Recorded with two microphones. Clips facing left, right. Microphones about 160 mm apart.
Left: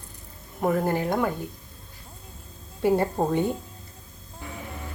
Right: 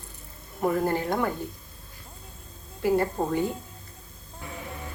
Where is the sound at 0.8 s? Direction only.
15° left (ahead or behind).